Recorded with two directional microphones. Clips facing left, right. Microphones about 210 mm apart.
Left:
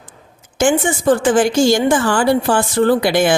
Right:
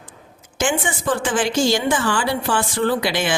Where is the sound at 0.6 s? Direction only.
45° left (ahead or behind).